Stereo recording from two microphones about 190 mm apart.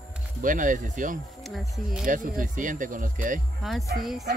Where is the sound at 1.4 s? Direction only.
Centre (ahead or behind).